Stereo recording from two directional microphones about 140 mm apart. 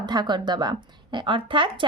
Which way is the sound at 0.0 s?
30° right (ahead or behind).